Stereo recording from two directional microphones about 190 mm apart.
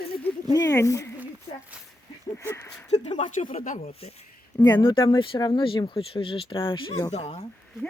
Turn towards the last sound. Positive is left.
turn(degrees=30)  # may be behind; listen again after turning